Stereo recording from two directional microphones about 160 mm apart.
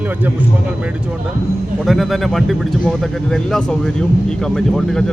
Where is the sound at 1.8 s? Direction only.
Centre (ahead or behind).